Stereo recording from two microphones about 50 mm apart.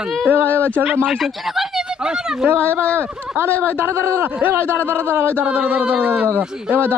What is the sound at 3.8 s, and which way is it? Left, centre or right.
Speech, right.